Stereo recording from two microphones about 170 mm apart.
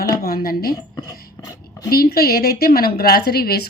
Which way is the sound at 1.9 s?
60° left (ahead or behind).